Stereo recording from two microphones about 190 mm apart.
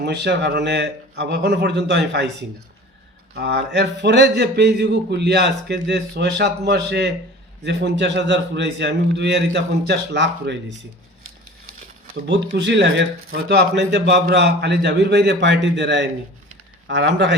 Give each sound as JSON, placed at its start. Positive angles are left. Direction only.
{"t": 0.0, "sound": "speech", "side_deg": -65}
{"t": 3.3, "sound": "a man's voice", "side_deg": -65}
{"t": 12.3, "sound": "a man's voice", "side_deg": -65}